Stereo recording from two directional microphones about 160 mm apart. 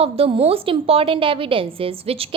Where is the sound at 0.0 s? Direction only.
35° right (ahead or behind).